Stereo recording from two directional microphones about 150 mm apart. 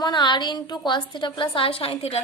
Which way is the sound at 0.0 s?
30° left (ahead or behind).